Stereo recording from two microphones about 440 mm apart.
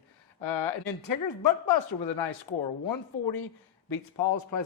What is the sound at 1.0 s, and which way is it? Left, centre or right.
Speech, left.